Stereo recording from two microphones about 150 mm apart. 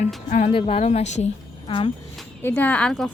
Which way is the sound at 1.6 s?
35° left (ahead or behind).